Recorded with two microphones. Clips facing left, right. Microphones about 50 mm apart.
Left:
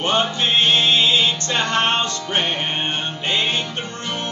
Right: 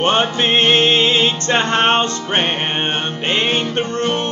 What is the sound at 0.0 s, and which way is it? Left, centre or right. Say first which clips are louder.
Music: right 4 dB; right.